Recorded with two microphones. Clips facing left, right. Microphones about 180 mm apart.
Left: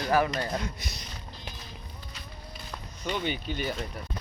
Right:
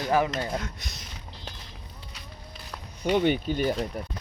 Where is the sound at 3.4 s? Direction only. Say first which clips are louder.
Right 6 dB; 45° right (ahead or behind).